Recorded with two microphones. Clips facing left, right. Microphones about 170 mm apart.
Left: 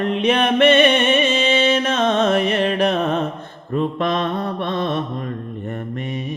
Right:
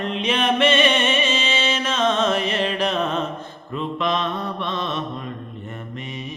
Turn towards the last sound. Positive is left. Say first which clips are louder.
# left 4 dB
turn(degrees=55)  # may be behind; listen again after turning